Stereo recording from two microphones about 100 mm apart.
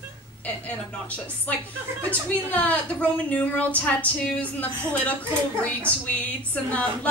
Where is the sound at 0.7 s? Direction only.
15° left (ahead or behind).